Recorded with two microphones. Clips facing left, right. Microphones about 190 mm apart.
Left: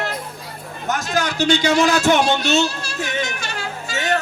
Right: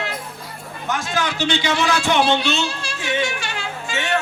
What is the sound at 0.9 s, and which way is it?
A man's voice, 40° left (ahead or behind).